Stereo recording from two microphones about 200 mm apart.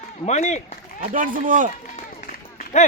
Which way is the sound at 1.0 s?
45° right (ahead or behind).